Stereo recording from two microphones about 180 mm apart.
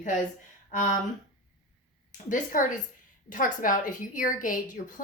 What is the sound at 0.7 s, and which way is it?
Speech, 45° left (ahead or behind).